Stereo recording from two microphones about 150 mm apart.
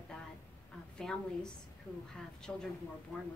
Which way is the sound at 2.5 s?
5° left (ahead or behind).